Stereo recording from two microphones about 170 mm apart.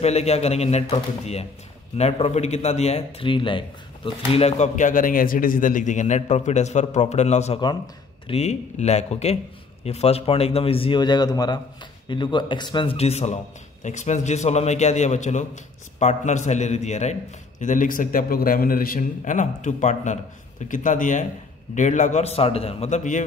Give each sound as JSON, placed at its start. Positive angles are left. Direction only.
{"t": 0.0, "sound": "speech", "side_deg": 40}
{"t": 7.6, "sound": "speech", "side_deg": 25}
{"t": 8.4, "sound": "a man's voice", "side_deg": 40}